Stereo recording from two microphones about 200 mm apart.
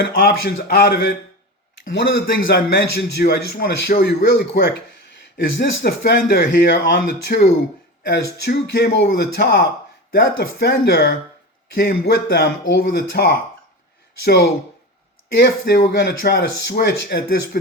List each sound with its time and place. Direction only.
0.0 s a man's voice: 50° left (ahead or behind)
15.4 s a man's voice: 55° left (ahead or behind)